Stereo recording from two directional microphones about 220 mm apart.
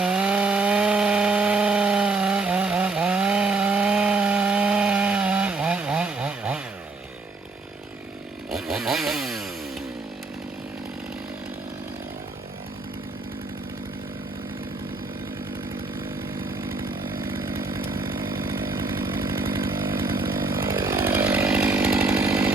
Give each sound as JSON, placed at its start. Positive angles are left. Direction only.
{"t": 0.0, "sound": "wood", "side_deg": -5}
{"t": 8.4, "sound": "chainsaw", "side_deg": 0}
{"t": 16.0, "sound": "chainsaw", "side_deg": -10}
{"t": 20.6, "sound": "chainsaw", "side_deg": -20}